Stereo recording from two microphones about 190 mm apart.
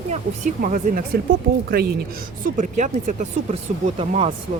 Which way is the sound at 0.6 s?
45° right (ahead or behind).